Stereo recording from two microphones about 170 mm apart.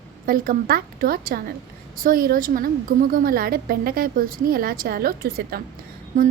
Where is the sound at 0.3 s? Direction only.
55° right (ahead or behind).